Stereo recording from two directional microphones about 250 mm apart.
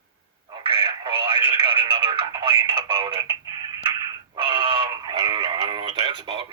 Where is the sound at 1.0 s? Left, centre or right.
Centre.